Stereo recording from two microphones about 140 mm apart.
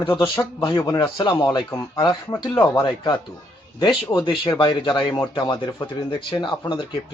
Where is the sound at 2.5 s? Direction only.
15° left (ahead or behind).